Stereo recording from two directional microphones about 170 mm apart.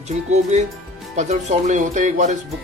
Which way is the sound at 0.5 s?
45° right (ahead or behind).